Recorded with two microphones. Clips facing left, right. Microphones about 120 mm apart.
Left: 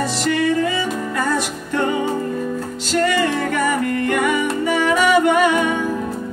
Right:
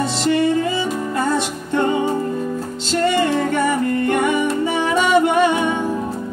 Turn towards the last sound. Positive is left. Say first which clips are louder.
# even
turn(degrees=-25)  # may be behind; listen again after turning